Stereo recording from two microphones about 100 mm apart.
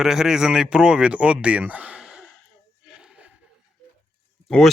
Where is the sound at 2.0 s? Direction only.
5° right (ahead or behind).